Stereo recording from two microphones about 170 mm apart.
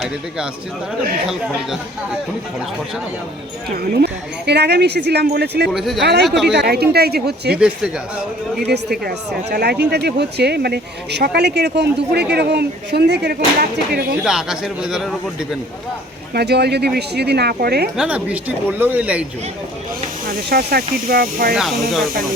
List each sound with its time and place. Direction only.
1.3 s a man's voice: 5° right (ahead or behind)
3.9 s speech: 75° right (ahead or behind)
5.6 s a man's voice: centre (ahead or behind)
6.0 s speech: 75° right (ahead or behind)
6.2 s a man's voice: centre (ahead or behind)
6.5 s speech: 80° right
8.6 s speech: 75° right (ahead or behind)
14.3 s a man's voice: 5° right (ahead or behind)
16.3 s speech: 75° right (ahead or behind)
17.9 s speech: 5° right (ahead or behind)
20.5 s speech: 65° right (ahead or behind)
21.5 s a man's voice: centre (ahead or behind)